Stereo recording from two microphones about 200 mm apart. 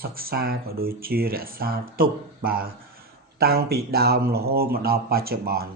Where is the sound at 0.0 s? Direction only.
50° right (ahead or behind).